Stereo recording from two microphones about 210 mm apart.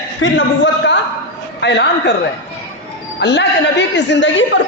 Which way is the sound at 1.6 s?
55° left (ahead or behind).